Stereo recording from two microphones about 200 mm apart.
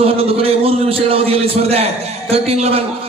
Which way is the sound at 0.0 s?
30° right (ahead or behind).